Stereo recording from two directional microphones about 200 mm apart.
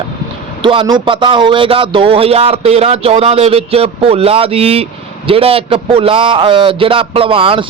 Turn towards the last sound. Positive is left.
turn(degrees=-25)  # may be behind; listen again after turning